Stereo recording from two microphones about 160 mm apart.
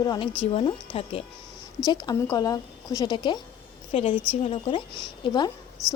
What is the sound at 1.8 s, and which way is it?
A woman's voice, 25° left (ahead or behind).